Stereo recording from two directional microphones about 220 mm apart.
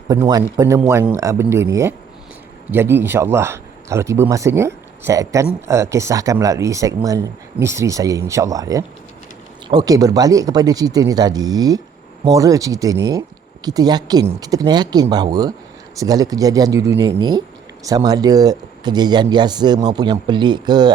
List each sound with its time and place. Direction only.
0.1 s speech: 15° right (ahead or behind)